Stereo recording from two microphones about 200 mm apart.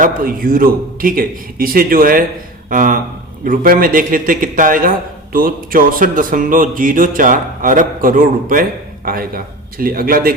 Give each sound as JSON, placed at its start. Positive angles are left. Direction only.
{"t": 0.0, "sound": "speech", "side_deg": -45}